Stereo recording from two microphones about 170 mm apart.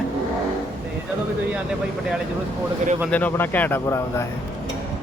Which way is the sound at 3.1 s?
10° left (ahead or behind).